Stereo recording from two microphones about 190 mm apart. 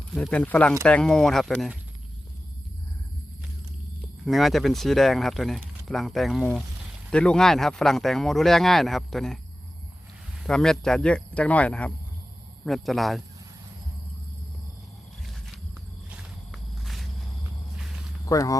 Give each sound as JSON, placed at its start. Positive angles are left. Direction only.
{"t": 0.1, "sound": "speech", "side_deg": 5}
{"t": 4.3, "sound": "speech", "side_deg": 0}
{"t": 10.4, "sound": "speech", "side_deg": 5}
{"t": 15.3, "sound": "a sound", "side_deg": 0}
{"t": 16.0, "sound": "walk", "side_deg": -5}
{"t": 18.3, "sound": "speech", "side_deg": 20}